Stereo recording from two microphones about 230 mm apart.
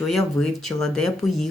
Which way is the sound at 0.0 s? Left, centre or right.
Centre.